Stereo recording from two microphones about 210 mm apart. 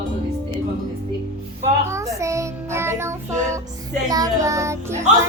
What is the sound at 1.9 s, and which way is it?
A woman's voice, 15° right (ahead or behind).